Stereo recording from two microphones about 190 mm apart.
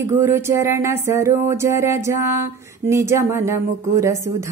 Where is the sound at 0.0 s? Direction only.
10° right (ahead or behind).